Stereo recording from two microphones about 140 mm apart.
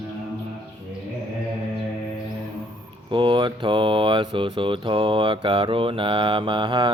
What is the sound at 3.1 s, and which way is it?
Speech, 35° right (ahead or behind).